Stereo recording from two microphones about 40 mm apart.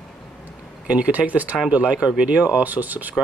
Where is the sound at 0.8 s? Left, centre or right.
Right.